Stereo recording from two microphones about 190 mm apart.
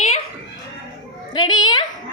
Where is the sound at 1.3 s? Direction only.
20° left (ahead or behind).